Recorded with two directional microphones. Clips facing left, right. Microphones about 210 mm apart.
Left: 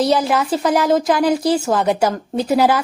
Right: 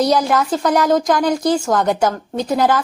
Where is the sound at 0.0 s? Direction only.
Centre (ahead or behind).